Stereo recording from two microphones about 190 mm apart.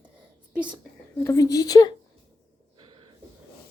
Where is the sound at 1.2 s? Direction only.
15° left (ahead or behind).